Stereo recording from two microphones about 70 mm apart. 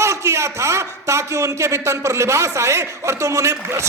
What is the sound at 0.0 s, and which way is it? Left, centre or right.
A man's voice, right.